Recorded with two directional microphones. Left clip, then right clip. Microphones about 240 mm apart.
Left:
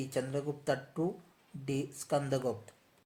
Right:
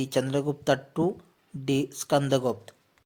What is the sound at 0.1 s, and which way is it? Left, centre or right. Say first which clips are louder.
Speech: right 8 dB; right.